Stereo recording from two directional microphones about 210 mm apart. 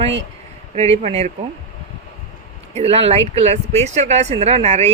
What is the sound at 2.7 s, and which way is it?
Speech, 30° right (ahead or behind).